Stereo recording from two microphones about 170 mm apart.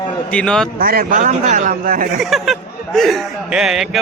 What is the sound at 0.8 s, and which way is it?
A man's voice, 60° right (ahead or behind).